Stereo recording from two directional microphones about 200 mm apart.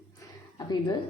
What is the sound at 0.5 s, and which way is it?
Speech, 20° left (ahead or behind).